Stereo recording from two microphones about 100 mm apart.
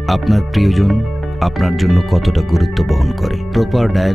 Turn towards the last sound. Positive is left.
turn(degrees=0)  # may be behind; listen again after turning